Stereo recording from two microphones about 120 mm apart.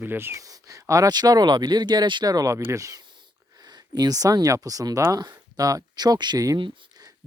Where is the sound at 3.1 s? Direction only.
35° right (ahead or behind).